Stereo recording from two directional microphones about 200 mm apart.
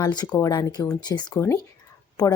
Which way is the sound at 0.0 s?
20° left (ahead or behind).